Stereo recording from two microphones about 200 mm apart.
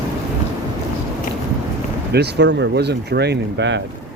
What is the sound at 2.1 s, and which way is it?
Speech, 55° right (ahead or behind).